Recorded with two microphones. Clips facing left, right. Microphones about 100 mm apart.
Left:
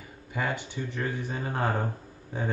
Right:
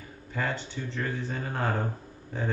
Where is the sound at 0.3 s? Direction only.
15° left (ahead or behind).